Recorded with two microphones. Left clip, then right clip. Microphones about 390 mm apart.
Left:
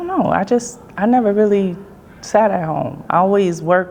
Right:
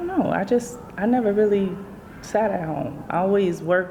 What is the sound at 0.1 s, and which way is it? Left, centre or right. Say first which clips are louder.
A woman's voice: left 6 dB; left.